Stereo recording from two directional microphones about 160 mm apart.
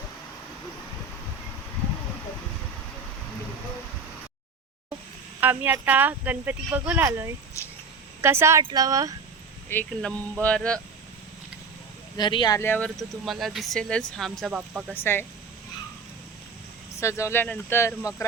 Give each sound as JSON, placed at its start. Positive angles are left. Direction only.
{"t": 5.4, "sound": "speech", "side_deg": -10}
{"t": 7.6, "sound": "speech", "side_deg": 20}
{"t": 8.2, "sound": "speech", "side_deg": -15}
{"t": 9.6, "sound": "speech", "side_deg": 10}
{"t": 12.1, "sound": "speech", "side_deg": 30}
{"t": 12.5, "sound": "speech", "side_deg": 10}
{"t": 14.9, "sound": "speech", "side_deg": 15}
{"t": 17.0, "sound": "speech", "side_deg": 20}